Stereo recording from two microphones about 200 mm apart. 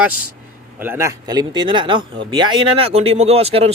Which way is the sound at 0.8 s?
10° right (ahead or behind).